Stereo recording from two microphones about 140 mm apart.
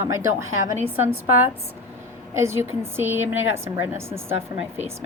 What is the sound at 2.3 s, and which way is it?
A woman's voice, 20° right (ahead or behind).